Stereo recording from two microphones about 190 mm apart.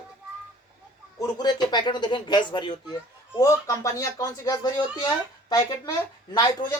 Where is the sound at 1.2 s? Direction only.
20° left (ahead or behind).